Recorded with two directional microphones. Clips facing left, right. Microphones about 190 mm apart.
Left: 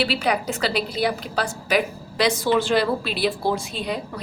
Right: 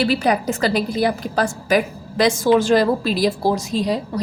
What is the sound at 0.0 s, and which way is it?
A woman's voice, 45° right (ahead or behind).